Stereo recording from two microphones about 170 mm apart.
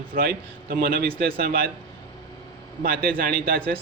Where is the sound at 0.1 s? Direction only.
65° right (ahead or behind).